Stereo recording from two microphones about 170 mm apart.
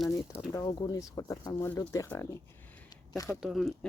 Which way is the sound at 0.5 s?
25° left (ahead or behind).